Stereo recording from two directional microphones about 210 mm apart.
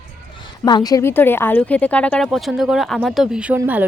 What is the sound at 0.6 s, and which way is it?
A woman's voice, 20° left (ahead or behind).